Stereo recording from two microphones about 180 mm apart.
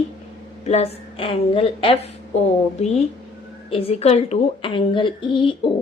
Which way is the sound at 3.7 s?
35° left (ahead or behind).